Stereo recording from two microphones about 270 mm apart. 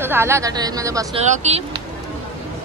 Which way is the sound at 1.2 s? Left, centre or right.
Right.